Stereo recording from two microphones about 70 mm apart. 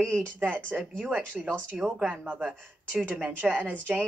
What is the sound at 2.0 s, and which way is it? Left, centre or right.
Speech, centre.